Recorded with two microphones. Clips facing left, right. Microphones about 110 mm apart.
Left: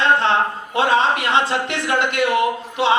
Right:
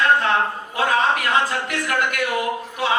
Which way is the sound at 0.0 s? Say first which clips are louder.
Left 1 dB; 25° left (ahead or behind).